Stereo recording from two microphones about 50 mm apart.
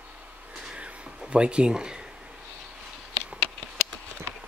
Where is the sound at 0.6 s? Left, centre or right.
Right.